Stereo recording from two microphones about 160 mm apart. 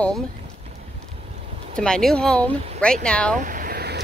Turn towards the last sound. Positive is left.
turn(degrees=-85)